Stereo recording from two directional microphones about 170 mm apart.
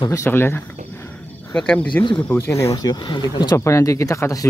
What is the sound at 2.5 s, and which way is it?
Speech, 20° left (ahead or behind).